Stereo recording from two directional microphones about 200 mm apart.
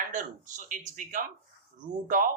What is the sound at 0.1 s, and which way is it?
A man's voice, 40° right (ahead or behind).